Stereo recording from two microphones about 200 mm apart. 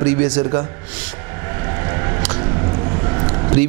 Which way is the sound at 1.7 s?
20° right (ahead or behind).